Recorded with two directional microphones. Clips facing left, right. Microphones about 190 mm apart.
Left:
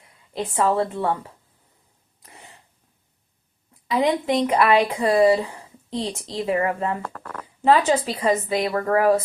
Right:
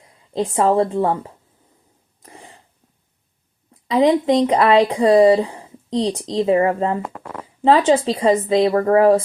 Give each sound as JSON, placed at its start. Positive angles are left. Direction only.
{"t": 0.0, "sound": "a woman's voice", "side_deg": -30}
{"t": 2.2, "sound": "a sound", "side_deg": -30}
{"t": 3.8, "sound": "speech", "side_deg": -30}
{"t": 7.0, "sound": "speech", "side_deg": -15}